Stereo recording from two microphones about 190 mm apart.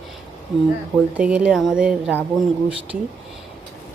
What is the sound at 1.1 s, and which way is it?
Speech, 5° right (ahead or behind).